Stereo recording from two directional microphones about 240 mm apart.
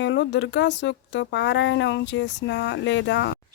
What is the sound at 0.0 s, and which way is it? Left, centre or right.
Speech, left.